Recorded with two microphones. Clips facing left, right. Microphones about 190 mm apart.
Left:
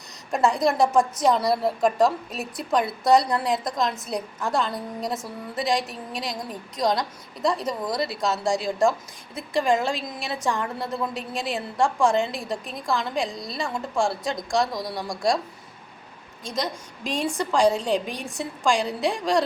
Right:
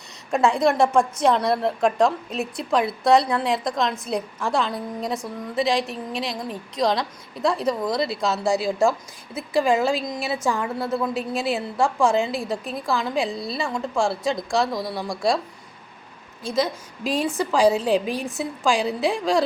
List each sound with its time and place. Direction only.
0.3 s a woman's voice: centre (ahead or behind)
16.6 s a woman's voice: 5° right (ahead or behind)